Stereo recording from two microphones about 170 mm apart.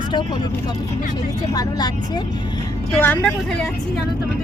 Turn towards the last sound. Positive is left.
turn(degrees=10)  # may be behind; listen again after turning